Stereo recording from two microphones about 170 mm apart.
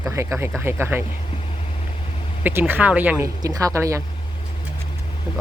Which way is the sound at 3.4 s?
20° right (ahead or behind).